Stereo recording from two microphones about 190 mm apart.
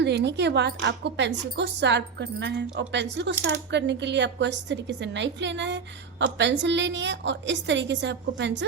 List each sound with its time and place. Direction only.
0.0 s a woman's voice: 65° right (ahead or behind)